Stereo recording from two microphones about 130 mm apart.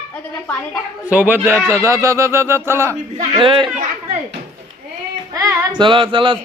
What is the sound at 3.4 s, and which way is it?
Speech, 40° right (ahead or behind).